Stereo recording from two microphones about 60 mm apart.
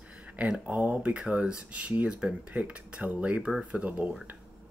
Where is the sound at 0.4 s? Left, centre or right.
Right.